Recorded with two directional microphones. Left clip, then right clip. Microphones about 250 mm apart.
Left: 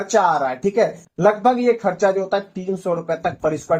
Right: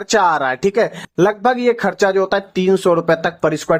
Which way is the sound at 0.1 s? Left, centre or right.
Right.